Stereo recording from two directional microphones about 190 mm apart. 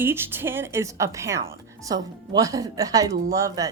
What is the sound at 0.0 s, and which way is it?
A woman's voice, 10° right (ahead or behind).